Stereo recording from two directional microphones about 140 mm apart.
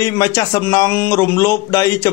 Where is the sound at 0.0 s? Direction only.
25° left (ahead or behind).